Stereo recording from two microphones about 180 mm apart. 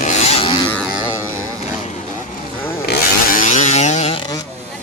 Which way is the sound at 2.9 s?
50° left (ahead or behind).